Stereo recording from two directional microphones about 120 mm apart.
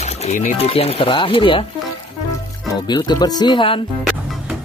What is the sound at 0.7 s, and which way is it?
Speech, 55° left (ahead or behind).